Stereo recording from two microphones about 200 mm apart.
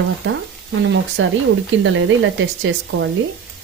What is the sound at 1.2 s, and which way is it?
Speech, 70° right (ahead or behind).